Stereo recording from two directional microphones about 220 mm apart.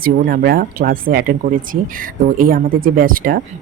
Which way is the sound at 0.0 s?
45° right (ahead or behind).